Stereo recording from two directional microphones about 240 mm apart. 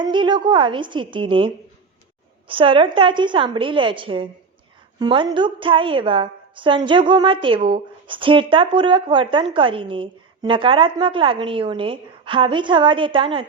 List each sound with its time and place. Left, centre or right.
0.0 s a woman's voice: centre
2.5 s a woman's voice: right